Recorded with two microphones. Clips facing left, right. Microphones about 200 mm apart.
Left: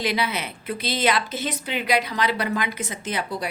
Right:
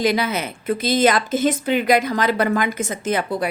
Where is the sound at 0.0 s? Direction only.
45° right (ahead or behind).